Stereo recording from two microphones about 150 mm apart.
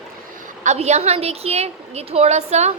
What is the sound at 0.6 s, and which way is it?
A woman's voice, 50° right (ahead or behind).